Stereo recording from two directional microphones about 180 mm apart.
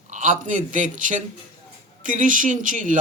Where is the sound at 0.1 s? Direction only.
45° right (ahead or behind).